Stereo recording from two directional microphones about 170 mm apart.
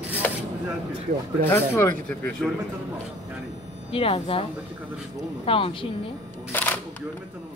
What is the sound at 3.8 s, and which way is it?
Speech, 35° left (ahead or behind).